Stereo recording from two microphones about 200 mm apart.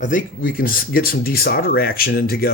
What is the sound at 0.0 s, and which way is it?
Speech, 40° left (ahead or behind).